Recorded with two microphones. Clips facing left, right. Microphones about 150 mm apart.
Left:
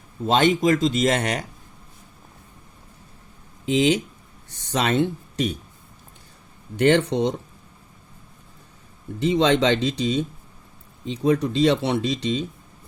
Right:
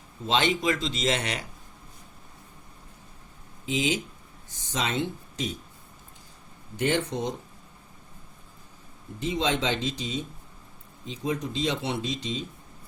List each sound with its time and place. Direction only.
0.3 s speech: 45° left (ahead or behind)
3.7 s speech: 65° left (ahead or behind)
6.7 s speech: 70° left (ahead or behind)
9.1 s speech: 70° left (ahead or behind)